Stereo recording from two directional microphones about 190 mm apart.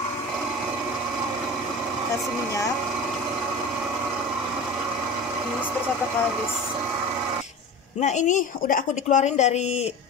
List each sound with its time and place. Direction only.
8.0 s speech: 40° left (ahead or behind)